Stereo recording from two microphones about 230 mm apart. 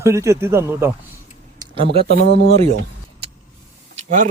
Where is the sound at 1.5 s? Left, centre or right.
Right.